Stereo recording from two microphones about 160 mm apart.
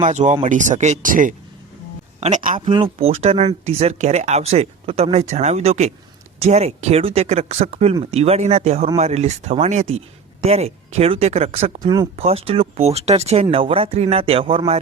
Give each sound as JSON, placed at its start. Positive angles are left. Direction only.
{"t": 0.0, "sound": "speech", "side_deg": -50}
{"t": 2.6, "sound": "speech", "side_deg": -35}
{"t": 11.8, "sound": "speech", "side_deg": -25}
{"t": 12.1, "sound": "speech", "side_deg": -40}